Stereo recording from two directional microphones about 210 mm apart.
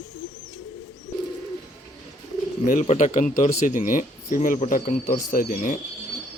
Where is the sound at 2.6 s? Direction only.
35° left (ahead or behind).